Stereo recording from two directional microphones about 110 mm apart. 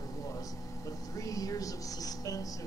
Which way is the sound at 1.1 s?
30° left (ahead or behind).